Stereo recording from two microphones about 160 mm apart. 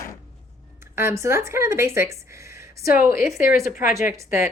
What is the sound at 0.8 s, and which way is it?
Speech, 15° right (ahead or behind).